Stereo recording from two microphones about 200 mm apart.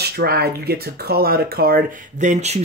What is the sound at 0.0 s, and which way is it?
Speech, 50° right (ahead or behind).